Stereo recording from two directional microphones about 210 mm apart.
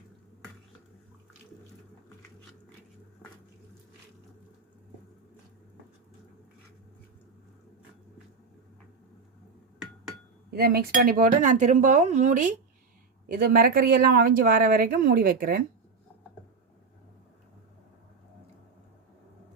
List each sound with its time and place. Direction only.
10.5 s speech: 45° right (ahead or behind)